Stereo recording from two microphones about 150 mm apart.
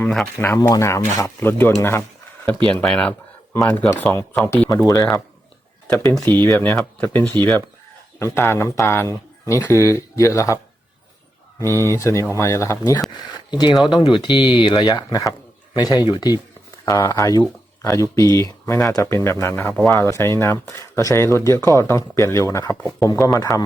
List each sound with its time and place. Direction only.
0.3 s speech: 20° left (ahead or behind)
2.6 s speech: 5° left (ahead or behind)
5.9 s speech: 10° left (ahead or behind)
11.6 s speech: 15° left (ahead or behind)
22.8 s speech: centre (ahead or behind)
23.0 s speech: 20° left (ahead or behind)